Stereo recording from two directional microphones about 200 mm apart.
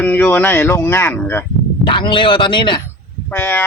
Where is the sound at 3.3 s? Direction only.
10° left (ahead or behind).